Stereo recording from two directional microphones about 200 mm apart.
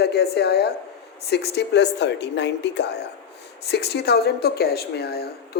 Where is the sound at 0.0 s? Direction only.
55° left (ahead or behind).